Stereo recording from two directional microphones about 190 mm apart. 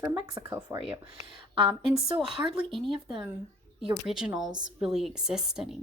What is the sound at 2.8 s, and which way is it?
Speech, 25° right (ahead or behind).